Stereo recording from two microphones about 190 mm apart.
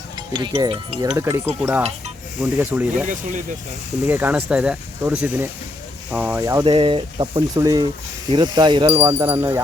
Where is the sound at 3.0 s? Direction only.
40° right (ahead or behind).